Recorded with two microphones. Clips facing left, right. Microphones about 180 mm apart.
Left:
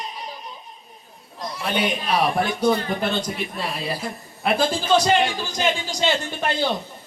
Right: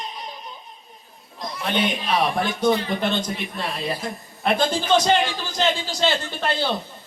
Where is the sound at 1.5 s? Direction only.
5° left (ahead or behind).